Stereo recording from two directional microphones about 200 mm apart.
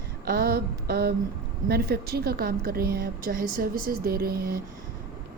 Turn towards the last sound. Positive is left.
turn(degrees=-50)  # may be behind; listen again after turning